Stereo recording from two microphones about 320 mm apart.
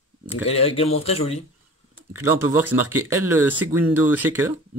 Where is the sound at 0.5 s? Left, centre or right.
Centre.